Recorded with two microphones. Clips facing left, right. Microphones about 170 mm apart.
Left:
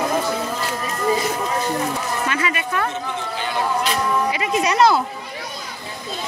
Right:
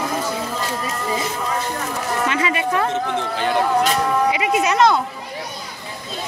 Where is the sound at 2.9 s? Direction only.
70° right (ahead or behind).